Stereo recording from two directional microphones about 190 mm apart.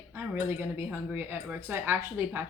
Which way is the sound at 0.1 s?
10° right (ahead or behind).